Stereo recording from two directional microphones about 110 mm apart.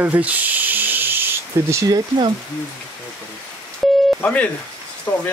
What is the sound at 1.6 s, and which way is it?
Speech, 25° right (ahead or behind).